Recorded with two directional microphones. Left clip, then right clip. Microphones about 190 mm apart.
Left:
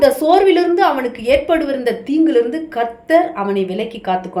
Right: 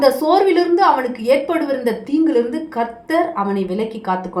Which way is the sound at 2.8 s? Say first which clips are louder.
Left 4 dB; 30° left (ahead or behind).